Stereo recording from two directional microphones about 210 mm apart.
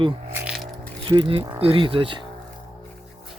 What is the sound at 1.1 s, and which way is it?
Speech, 25° right (ahead or behind).